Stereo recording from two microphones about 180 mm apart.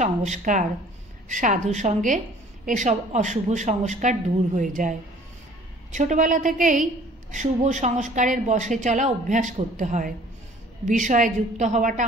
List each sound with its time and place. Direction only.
0.0 s a woman's voice: 40° right (ahead or behind)
5.9 s a woman's voice: 45° right (ahead or behind)